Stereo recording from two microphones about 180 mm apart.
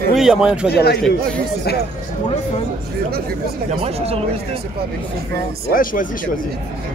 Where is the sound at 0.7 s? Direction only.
65° left (ahead or behind).